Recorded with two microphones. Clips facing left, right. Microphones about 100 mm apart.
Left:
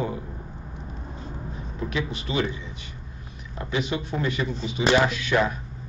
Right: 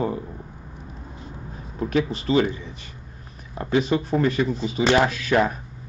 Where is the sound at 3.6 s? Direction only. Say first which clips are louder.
Right 6 dB; 40° right (ahead or behind).